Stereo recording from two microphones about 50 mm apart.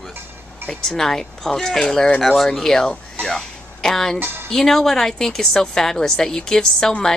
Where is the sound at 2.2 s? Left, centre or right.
Centre.